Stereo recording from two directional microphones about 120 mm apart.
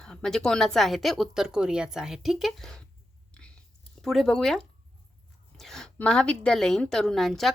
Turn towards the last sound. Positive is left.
turn(degrees=0)  # may be behind; listen again after turning